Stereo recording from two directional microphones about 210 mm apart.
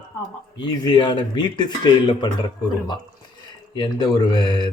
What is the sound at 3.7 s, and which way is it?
Speech, 20° left (ahead or behind).